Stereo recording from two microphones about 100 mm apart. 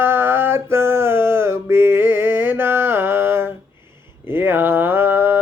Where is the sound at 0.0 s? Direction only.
25° right (ahead or behind).